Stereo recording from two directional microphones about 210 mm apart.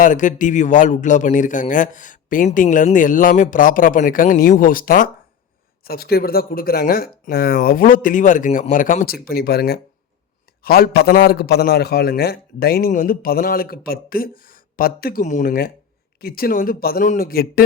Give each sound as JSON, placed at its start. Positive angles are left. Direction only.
{"t": 0.0, "sound": "a man's voice", "side_deg": 35}